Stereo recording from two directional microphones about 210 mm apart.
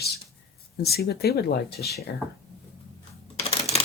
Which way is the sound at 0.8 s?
50° left (ahead or behind).